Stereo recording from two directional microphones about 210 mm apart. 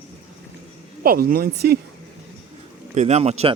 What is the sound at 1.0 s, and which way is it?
Speech, 45° right (ahead or behind).